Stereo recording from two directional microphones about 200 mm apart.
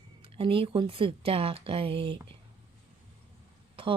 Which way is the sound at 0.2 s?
25° right (ahead or behind).